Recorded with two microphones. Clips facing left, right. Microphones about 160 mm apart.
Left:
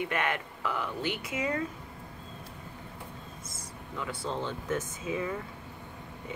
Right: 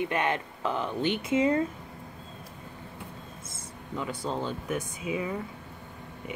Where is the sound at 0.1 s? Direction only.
20° right (ahead or behind).